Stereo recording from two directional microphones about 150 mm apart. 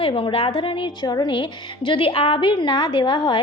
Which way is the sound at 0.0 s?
40° left (ahead or behind).